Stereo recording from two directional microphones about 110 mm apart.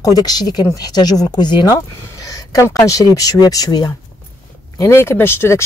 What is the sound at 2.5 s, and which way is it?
Speech, 30° left (ahead or behind).